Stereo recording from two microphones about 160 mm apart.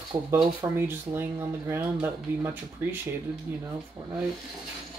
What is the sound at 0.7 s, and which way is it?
A man's voice, 15° right (ahead or behind).